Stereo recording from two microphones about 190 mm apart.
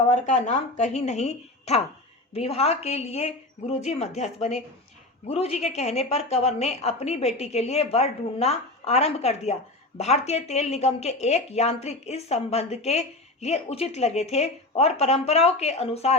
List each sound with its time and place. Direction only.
0.1 s speech: 35° left (ahead or behind)